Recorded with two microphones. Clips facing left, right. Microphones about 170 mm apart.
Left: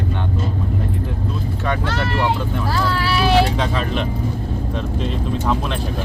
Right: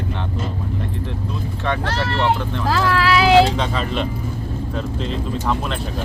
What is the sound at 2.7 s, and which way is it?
Speech, 90° right.